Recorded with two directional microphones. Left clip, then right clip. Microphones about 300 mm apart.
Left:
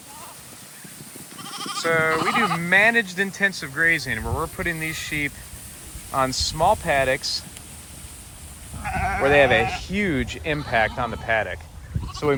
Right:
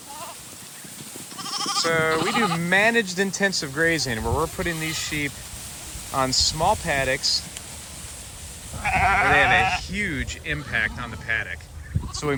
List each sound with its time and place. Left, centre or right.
1.4 s goat: right
1.8 s speech: centre
8.8 s sheep: centre
9.3 s speech: centre
12.2 s speech: centre